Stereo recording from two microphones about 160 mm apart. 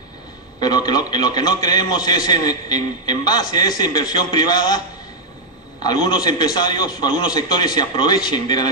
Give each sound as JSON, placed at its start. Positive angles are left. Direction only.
{"t": 0.6, "sound": "a man's voice", "side_deg": 25}
{"t": 6.0, "sound": "a man's voice", "side_deg": 25}